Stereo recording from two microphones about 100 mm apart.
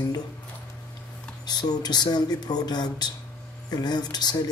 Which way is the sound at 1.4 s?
45° left (ahead or behind).